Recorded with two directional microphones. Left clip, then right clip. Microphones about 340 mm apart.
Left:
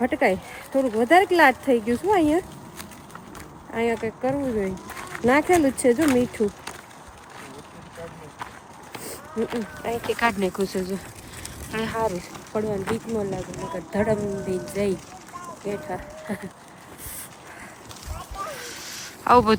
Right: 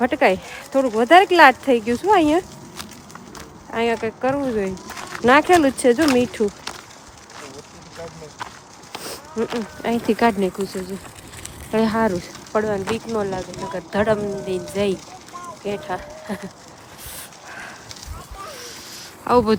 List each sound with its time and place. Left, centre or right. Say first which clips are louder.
0.0 s speech: right 4 dB; centre
9.8 s speech: right 5 dB; right
10.2 s speech: right 4 dB; centre
18.6 s a sound: even; centre